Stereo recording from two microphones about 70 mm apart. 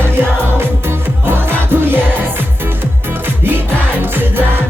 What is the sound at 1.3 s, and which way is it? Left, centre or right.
Music, right.